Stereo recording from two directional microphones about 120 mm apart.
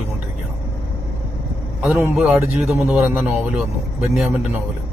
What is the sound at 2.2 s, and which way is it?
A man's voice, 5° right (ahead or behind).